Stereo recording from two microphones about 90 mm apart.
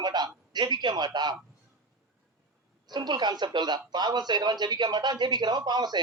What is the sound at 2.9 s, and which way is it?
Speech, 55° right (ahead or behind).